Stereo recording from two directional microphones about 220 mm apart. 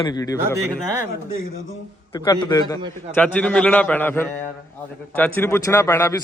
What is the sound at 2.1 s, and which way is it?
Speech, 20° left (ahead or behind).